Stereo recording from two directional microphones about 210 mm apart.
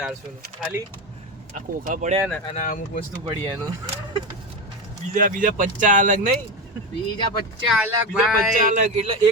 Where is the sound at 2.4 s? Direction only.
30° left (ahead or behind).